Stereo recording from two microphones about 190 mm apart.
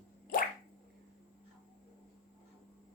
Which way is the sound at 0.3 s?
45° left (ahead or behind).